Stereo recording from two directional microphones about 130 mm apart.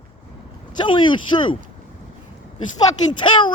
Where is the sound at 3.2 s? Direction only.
40° left (ahead or behind).